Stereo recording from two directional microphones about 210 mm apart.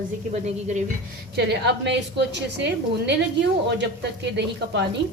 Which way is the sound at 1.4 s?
55° right (ahead or behind).